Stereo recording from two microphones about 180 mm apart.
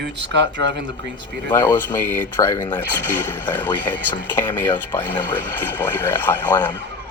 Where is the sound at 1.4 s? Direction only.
10° left (ahead or behind).